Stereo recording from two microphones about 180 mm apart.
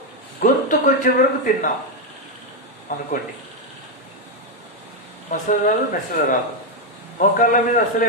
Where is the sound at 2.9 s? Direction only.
45° left (ahead or behind).